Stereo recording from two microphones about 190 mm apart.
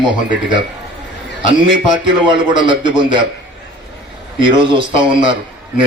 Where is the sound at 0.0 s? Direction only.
25° right (ahead or behind).